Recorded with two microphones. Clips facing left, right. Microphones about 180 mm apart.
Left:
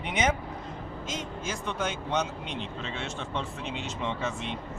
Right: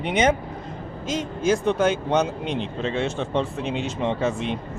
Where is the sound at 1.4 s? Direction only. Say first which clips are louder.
Right 14 dB; 90° right.